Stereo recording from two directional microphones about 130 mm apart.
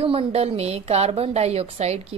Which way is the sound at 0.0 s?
45° right (ahead or behind).